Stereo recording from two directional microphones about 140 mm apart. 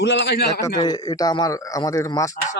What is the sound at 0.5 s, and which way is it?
A man's voice, 25° left (ahead or behind).